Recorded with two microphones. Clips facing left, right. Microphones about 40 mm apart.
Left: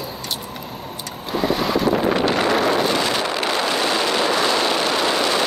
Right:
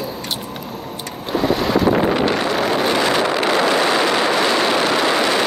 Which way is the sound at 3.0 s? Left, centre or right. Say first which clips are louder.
Right 4 dB; right.